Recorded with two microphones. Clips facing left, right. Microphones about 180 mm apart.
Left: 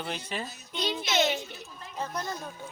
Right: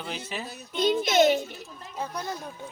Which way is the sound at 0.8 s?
50° right (ahead or behind).